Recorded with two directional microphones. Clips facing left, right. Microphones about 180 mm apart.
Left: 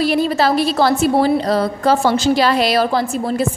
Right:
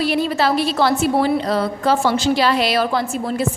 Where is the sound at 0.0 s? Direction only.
40° left (ahead or behind).